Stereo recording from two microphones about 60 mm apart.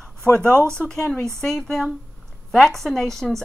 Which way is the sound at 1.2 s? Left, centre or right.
Centre.